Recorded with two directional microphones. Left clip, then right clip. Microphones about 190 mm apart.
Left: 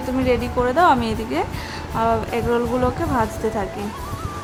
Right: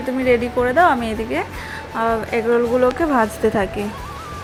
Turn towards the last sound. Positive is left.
turn(degrees=-20)  # may be behind; listen again after turning